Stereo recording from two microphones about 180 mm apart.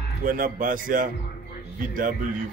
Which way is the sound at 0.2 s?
50° right (ahead or behind).